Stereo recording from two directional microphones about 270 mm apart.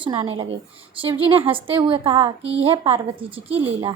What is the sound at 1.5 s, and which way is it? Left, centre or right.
A woman's voice, centre.